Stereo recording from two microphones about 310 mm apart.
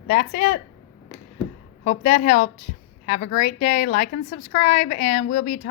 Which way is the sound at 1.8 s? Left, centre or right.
Left.